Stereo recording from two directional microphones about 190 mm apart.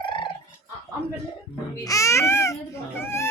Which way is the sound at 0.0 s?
25° left (ahead or behind).